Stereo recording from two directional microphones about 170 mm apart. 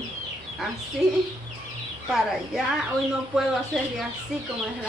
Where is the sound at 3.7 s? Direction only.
5° left (ahead or behind).